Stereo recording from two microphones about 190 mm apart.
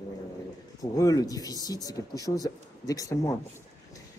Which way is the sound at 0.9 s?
20° left (ahead or behind).